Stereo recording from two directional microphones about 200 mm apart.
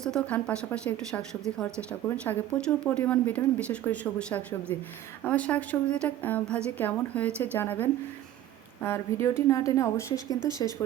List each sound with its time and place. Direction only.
0.0 s a woman's voice: 5° left (ahead or behind)